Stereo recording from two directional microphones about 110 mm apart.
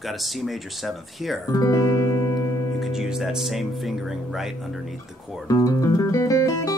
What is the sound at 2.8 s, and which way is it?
Speech, 5° right (ahead or behind).